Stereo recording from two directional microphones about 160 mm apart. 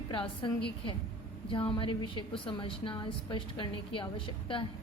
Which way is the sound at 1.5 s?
35° left (ahead or behind).